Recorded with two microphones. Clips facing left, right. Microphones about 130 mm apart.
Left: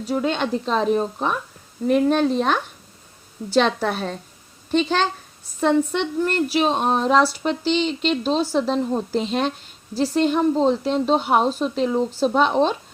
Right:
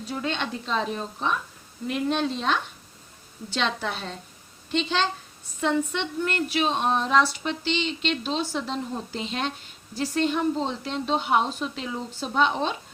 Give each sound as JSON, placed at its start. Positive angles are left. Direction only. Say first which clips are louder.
{"t": 0.1, "sound": "a woman's voice", "louder": "left 8 dB", "side_deg": 40}